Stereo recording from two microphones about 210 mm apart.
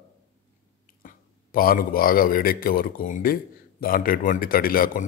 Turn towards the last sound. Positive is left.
turn(degrees=45)  # may be behind; listen again after turning